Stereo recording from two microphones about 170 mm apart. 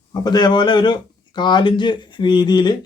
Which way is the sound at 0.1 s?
25° left (ahead or behind).